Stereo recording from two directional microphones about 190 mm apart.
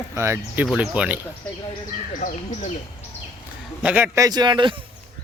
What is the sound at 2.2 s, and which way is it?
Speech, 45° left (ahead or behind).